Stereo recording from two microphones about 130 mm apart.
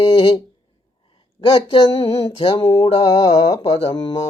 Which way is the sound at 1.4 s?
45° left (ahead or behind).